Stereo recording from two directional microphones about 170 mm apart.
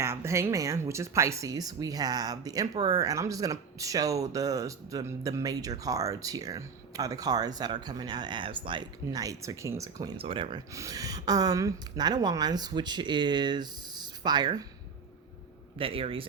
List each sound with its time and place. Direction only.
0.0 s speech: 15° right (ahead or behind); by 10.6 s 30° right (ahead or behind)
10.8 s speech: 20° right (ahead or behind)
15.8 s speech: 35° right (ahead or behind)